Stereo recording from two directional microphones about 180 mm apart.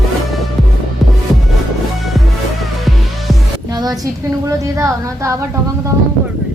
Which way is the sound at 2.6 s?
Centre (ahead or behind).